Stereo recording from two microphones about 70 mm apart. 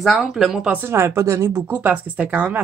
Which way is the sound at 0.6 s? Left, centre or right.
Right.